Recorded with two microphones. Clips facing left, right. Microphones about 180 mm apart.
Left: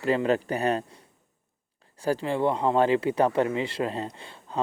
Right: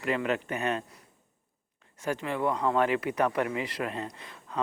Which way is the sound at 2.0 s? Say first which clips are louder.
Left 5 dB; 35° left (ahead or behind).